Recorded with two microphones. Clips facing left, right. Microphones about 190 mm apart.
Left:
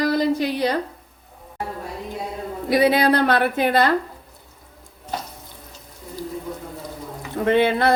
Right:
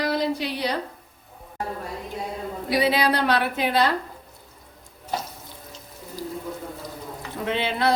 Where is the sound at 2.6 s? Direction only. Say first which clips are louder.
Left 5 dB; 50° left (ahead or behind).